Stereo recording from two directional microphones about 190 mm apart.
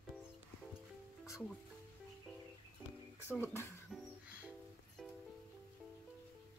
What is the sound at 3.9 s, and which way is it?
Music, 5° right (ahead or behind).